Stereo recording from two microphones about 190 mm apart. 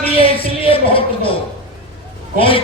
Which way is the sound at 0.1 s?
30° left (ahead or behind).